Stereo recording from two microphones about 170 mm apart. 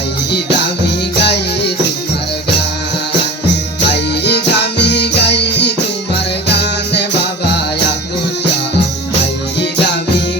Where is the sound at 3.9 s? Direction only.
80° left.